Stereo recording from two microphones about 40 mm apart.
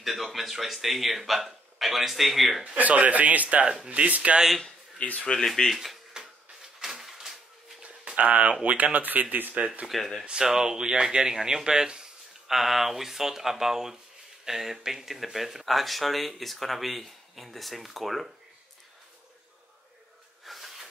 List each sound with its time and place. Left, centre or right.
0.0 s speech: centre
2.6 s speech: right
5.0 s speech: left
5.8 s a sound: centre
7.8 s a sound: right
8.2 s speech: right
9.8 s speech: centre
10.2 s speech: centre
20.4 s a sound: centre